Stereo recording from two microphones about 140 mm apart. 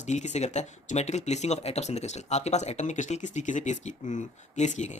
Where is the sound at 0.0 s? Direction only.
55° left (ahead or behind).